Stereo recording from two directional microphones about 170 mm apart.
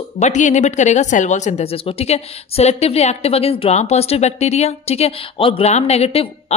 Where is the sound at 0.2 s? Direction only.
45° left (ahead or behind).